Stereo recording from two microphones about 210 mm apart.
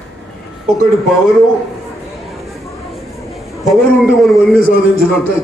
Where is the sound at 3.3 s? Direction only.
Centre (ahead or behind).